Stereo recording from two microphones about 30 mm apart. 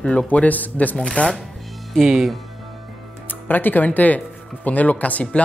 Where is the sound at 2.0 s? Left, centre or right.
Centre.